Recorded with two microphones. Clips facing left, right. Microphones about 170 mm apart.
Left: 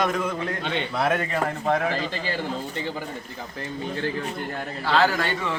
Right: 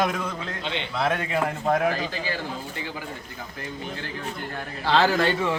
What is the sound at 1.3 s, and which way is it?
Speech, 10° right (ahead or behind).